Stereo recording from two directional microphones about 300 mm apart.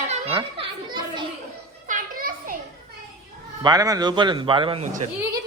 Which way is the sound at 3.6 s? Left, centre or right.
Centre.